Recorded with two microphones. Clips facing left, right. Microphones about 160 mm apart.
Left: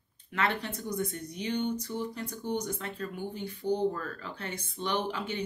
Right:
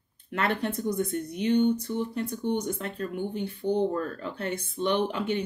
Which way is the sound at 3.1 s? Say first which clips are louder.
Right 6 dB; 55° right (ahead or behind).